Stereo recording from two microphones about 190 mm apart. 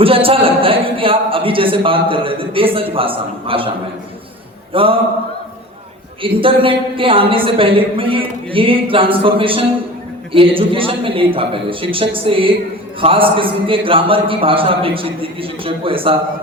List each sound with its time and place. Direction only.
0.0 s a man's voice: 30° right (ahead or behind)
4.7 s a sound: 30° right (ahead or behind)
6.2 s a man's voice: 25° right (ahead or behind)